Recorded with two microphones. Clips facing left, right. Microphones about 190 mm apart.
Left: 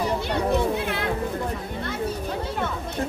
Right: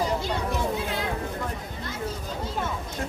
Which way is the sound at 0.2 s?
65° left (ahead or behind).